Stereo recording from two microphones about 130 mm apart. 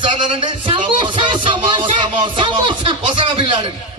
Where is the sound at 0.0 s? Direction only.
40° right (ahead or behind).